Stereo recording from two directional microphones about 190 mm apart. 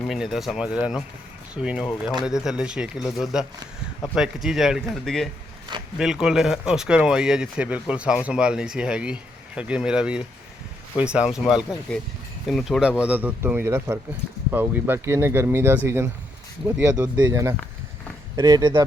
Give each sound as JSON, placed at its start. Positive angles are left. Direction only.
{"t": 0.0, "sound": "speech", "side_deg": 0}